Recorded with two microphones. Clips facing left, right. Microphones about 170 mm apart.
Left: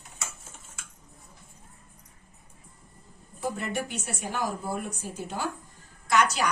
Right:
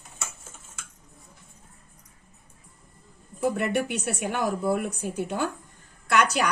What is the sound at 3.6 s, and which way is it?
A woman's voice, 65° right (ahead or behind).